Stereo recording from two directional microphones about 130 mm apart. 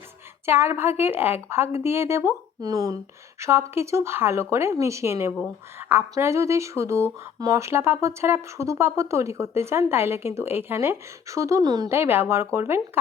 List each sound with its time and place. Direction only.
0.4 s speech: 20° right (ahead or behind)
11.9 s speech: 15° right (ahead or behind)